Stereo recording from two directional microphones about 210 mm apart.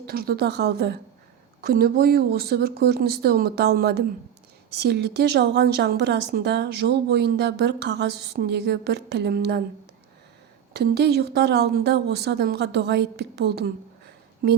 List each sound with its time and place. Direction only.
0.1 s a woman's voice: 45° right (ahead or behind)
10.8 s a woman's voice: 50° right (ahead or behind)